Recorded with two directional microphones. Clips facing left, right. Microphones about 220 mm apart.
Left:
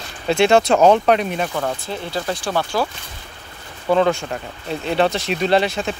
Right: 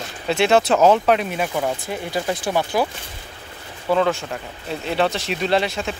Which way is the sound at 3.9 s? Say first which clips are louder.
Left 2 dB; centre (ahead or behind).